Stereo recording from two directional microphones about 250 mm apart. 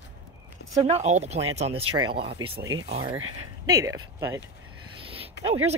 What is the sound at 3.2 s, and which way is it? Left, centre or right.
Speech, right.